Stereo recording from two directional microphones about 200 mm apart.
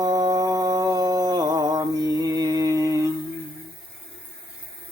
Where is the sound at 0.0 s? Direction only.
20° right (ahead or behind).